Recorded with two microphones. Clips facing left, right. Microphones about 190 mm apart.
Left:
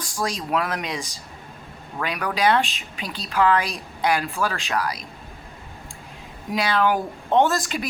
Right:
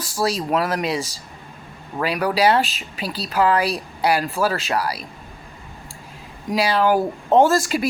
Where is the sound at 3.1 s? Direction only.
35° right (ahead or behind).